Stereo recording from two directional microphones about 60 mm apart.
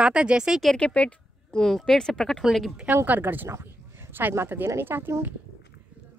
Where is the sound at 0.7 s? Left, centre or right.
Centre.